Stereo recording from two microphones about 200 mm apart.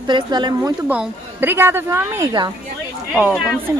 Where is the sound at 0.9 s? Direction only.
10° right (ahead or behind).